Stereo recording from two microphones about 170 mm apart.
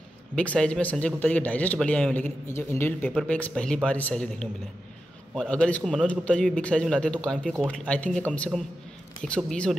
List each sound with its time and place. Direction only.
0.4 s a man's voice: 5° left (ahead or behind)